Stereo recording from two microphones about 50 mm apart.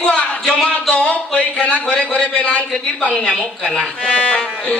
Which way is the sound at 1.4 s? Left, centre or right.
Left.